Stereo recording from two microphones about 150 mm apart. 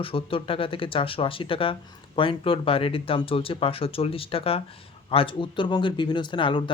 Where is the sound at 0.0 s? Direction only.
35° left (ahead or behind).